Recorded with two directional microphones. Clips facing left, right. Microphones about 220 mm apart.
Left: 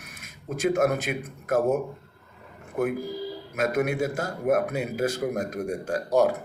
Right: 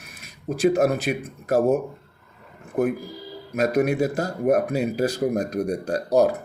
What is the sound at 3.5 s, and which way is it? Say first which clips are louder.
Speech: right 5 dB; 35° right (ahead or behind).